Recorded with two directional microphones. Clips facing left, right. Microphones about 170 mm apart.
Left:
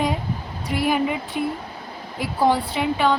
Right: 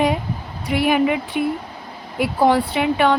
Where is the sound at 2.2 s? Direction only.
65° right (ahead or behind).